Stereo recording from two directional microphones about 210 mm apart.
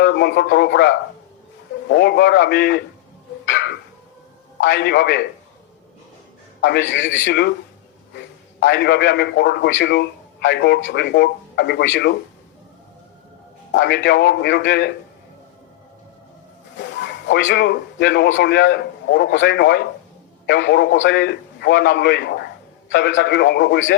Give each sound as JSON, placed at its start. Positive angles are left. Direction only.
{"t": 0.0, "sound": "a man's voice", "side_deg": 55}
{"t": 3.4, "sound": "music", "side_deg": 60}
{"t": 4.6, "sound": "a man's voice", "side_deg": 55}
{"t": 6.6, "sound": "a man's voice", "side_deg": 60}
{"t": 8.6, "sound": "a man's voice", "side_deg": 55}
{"t": 13.7, "sound": "a man's voice", "side_deg": 55}
{"t": 16.7, "sound": "a man's voice", "side_deg": 55}